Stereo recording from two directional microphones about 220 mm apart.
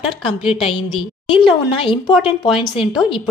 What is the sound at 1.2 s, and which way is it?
Speech, 25° left (ahead or behind).